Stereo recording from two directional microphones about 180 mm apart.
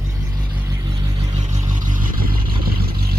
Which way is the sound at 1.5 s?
20° right (ahead or behind).